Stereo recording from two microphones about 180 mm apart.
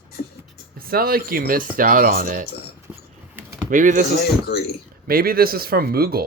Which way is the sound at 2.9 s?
10° right (ahead or behind).